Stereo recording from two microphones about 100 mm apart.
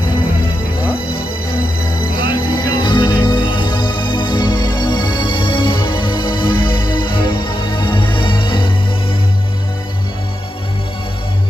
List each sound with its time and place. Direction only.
2.1 s music: 55° left (ahead or behind)